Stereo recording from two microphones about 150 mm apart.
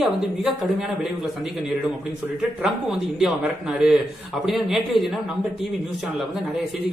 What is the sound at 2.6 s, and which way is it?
A man's voice, 5° right (ahead or behind).